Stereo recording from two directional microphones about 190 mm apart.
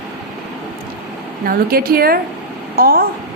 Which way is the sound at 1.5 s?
50° right (ahead or behind).